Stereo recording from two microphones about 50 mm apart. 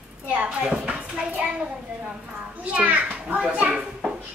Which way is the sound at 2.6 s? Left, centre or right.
Right.